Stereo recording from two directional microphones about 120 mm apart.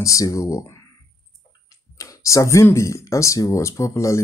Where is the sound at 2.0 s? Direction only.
25° left (ahead or behind).